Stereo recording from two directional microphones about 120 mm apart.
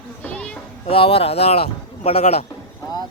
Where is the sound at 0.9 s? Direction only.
50° left (ahead or behind).